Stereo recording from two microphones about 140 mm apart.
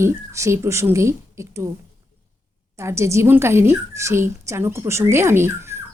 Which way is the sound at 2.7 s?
20° right (ahead or behind).